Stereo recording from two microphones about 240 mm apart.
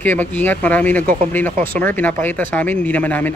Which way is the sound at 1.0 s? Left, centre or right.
Right.